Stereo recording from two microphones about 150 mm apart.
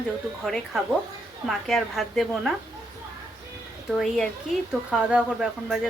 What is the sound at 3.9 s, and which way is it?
Speech, centre (ahead or behind).